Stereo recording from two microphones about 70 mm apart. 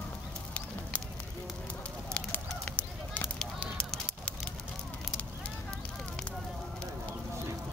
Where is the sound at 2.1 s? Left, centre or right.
Centre.